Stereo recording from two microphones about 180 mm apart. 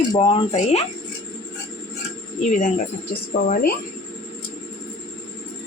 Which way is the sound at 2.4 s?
45° left (ahead or behind).